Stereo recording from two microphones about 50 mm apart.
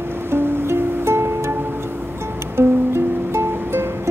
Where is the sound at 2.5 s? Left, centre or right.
Right.